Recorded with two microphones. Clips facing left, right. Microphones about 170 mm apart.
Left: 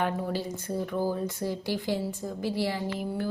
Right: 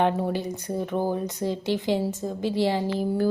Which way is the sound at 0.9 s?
20° right (ahead or behind).